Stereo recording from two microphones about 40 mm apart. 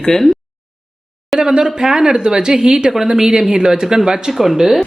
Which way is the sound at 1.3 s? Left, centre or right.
Centre.